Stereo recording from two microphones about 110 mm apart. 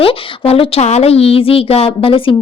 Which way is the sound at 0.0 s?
60° left (ahead or behind).